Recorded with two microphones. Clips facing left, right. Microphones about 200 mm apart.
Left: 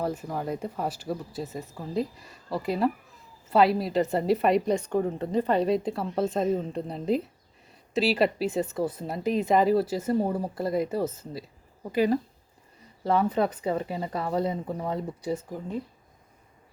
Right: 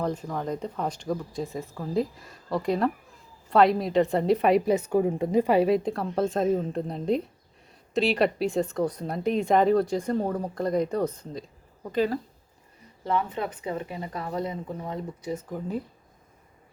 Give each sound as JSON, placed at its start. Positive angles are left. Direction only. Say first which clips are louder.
{"t": 0.0, "sound": "a woman's voice", "louder": "right 1 dB", "side_deg": 5}
{"t": 13.1, "sound": "speech", "louder": "left 4 dB", "side_deg": 35}
{"t": 15.4, "sound": "a woman's voice", "louder": "right 2 dB", "side_deg": 0}